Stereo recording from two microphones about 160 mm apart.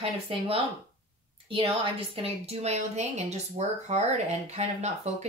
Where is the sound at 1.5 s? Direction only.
35° right (ahead or behind).